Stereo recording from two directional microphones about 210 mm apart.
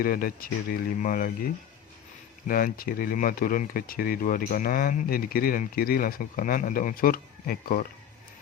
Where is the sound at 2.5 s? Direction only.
45° left (ahead or behind).